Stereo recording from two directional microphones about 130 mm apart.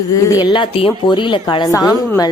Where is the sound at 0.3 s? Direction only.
30° left (ahead or behind).